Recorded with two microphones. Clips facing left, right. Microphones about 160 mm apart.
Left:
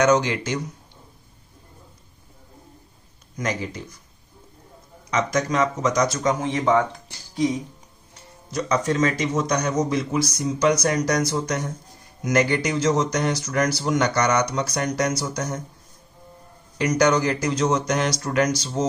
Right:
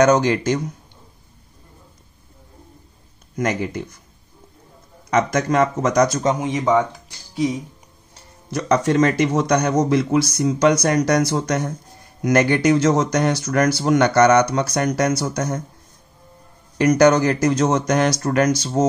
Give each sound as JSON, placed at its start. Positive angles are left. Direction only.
{"t": 0.0, "sound": "speech", "side_deg": -45}
{"t": 3.3, "sound": "speech", "side_deg": -55}
{"t": 5.1, "sound": "speech", "side_deg": -55}
{"t": 6.4, "sound": "speech", "side_deg": -15}
{"t": 8.5, "sound": "speech", "side_deg": -60}
{"t": 16.7, "sound": "speech", "side_deg": -55}